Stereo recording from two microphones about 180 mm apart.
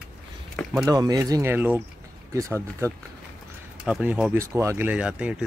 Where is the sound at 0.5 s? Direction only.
Centre (ahead or behind).